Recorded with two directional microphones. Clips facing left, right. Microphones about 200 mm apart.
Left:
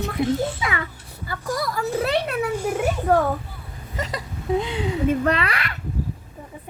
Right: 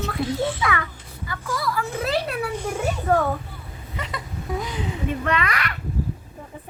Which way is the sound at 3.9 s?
40° left (ahead or behind).